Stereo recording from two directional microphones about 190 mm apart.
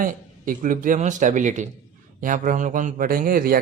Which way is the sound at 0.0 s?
45° right (ahead or behind).